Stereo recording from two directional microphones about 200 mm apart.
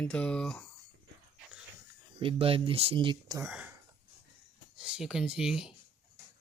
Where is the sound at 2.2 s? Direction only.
25° right (ahead or behind).